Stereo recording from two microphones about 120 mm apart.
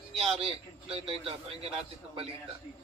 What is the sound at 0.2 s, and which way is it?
A man's voice, 55° right (ahead or behind).